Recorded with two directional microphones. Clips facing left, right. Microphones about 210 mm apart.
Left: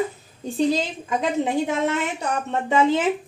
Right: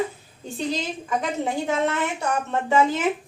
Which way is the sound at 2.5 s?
20° left (ahead or behind).